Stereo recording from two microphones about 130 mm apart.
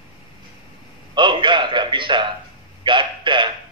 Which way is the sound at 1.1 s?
35° right (ahead or behind).